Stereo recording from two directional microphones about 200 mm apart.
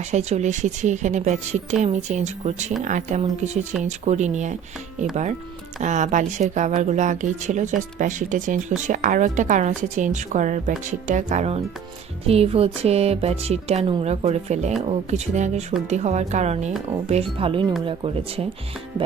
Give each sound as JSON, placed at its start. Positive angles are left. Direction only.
{"t": 0.1, "sound": "speech", "side_deg": -35}
{"t": 5.8, "sound": "speech", "side_deg": -35}